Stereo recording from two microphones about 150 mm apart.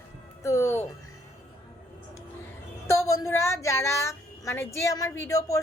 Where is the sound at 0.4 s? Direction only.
20° left (ahead or behind).